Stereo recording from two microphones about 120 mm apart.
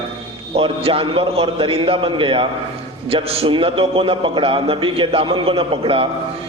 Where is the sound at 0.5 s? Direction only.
50° right (ahead or behind).